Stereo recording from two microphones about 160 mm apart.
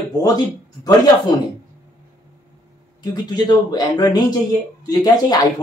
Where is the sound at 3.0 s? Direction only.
25° left (ahead or behind).